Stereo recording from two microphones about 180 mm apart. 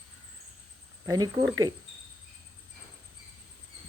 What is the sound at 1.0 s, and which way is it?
Speech, 20° right (ahead or behind).